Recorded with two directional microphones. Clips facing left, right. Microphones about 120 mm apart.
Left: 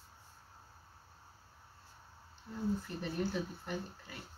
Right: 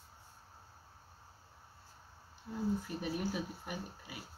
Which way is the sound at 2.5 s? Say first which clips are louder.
Right 1 dB; 5° right (ahead or behind).